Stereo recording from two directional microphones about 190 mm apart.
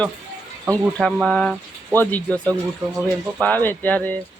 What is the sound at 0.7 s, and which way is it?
Speech, 5° left (ahead or behind).